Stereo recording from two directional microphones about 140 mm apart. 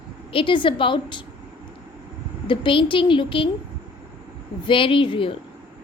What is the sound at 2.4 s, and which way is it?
A woman's voice, 35° left (ahead or behind).